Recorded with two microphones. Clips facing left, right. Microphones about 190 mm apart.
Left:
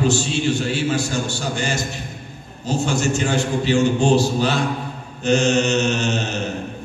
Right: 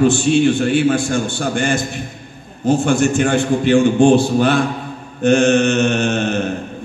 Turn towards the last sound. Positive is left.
turn(degrees=-55)  # may be behind; listen again after turning